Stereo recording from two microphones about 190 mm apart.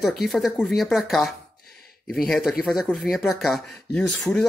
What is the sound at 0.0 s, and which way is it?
Speech, centre (ahead or behind).